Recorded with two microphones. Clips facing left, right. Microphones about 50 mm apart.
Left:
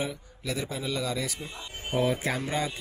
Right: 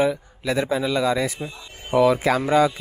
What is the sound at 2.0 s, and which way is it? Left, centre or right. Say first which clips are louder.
Speech: right 10 dB; right.